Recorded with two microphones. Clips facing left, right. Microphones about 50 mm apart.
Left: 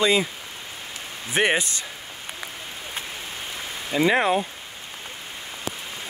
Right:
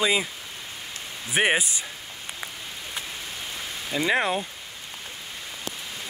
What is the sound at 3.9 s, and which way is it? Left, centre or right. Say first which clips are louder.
Speech: left 4 dB; centre.